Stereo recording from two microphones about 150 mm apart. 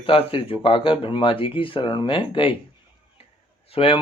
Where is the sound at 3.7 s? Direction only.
40° left (ahead or behind).